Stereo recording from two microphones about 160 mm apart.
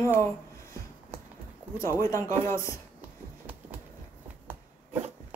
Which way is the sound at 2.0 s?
20° left (ahead or behind).